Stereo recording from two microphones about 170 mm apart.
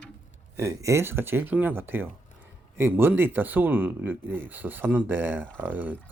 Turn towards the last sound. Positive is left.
turn(degrees=-10)  # may be behind; listen again after turning